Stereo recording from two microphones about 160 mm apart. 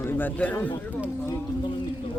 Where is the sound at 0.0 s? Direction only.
15° left (ahead or behind).